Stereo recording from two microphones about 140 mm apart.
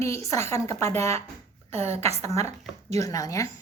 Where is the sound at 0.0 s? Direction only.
20° left (ahead or behind).